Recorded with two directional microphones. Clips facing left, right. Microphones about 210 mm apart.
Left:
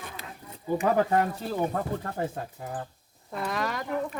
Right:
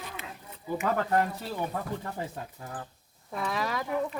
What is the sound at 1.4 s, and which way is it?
Speech, 50° left (ahead or behind).